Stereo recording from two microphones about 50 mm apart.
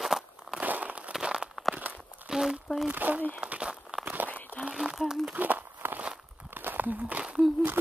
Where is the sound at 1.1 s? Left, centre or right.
Centre.